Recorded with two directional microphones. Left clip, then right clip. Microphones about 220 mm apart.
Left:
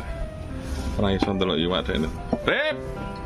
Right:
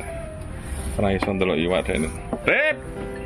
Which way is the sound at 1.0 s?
15° left (ahead or behind).